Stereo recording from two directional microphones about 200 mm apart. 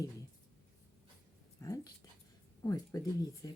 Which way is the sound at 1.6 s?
15° left (ahead or behind).